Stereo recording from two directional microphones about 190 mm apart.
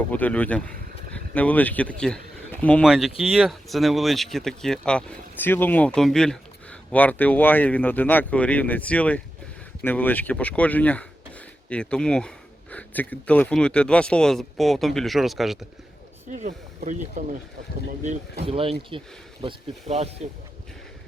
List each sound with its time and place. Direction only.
0.1 s speech: 10° left (ahead or behind)
16.3 s speech: 40° right (ahead or behind)
18.4 s speech: 30° right (ahead or behind)